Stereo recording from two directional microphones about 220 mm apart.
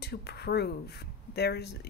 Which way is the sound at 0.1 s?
45° left (ahead or behind).